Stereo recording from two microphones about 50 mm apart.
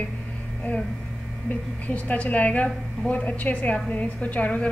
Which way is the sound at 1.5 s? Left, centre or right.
Left.